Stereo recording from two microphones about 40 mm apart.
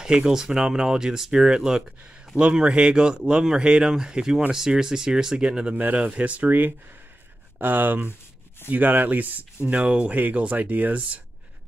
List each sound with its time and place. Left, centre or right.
0.0 s speech: centre
5.9 s speech: right
7.5 s speech: right
9.7 s speech: right
10.1 s speech: right